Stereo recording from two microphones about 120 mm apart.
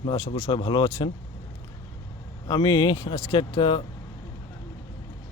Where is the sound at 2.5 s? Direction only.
40° left (ahead or behind).